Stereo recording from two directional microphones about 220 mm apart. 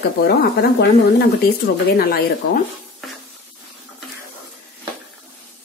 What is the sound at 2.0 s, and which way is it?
Speech, 45° left (ahead or behind).